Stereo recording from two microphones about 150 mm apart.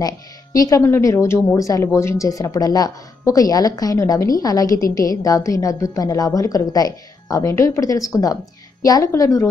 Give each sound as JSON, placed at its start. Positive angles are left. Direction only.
{"t": 0.0, "sound": "a woman's voice", "side_deg": 25}